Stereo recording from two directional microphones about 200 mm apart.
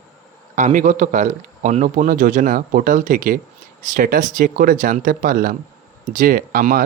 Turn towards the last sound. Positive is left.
turn(degrees=-45)  # may be behind; listen again after turning